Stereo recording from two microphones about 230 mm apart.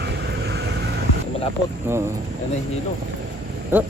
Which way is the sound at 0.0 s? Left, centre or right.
Right.